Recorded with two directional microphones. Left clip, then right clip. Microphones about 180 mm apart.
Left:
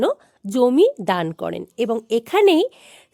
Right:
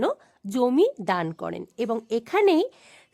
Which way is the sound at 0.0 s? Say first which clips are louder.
Left 5 dB; 25° left (ahead or behind).